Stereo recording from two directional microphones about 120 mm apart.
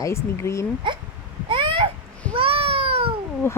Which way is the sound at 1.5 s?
45° right (ahead or behind).